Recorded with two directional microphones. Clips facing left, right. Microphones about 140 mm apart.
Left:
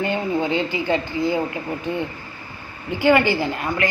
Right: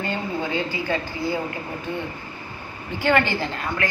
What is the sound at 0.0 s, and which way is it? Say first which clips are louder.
Speech: left 5 dB; 20° left (ahead or behind).